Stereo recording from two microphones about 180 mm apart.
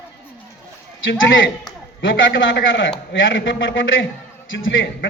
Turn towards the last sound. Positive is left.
turn(degrees=90)